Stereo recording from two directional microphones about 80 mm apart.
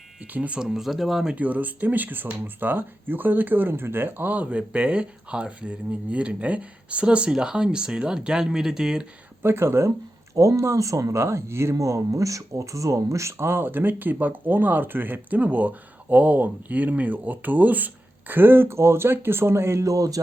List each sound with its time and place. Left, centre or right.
0.3 s speech: centre
0.7 s speech: centre
1.4 s speech: right
9.4 s speech: right
10.3 s speech: right